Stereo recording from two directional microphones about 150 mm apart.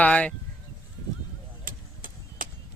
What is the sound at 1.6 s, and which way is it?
Vehicle, 65° right (ahead or behind).